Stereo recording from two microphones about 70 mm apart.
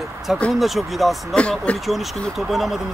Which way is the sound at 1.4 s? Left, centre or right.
Centre.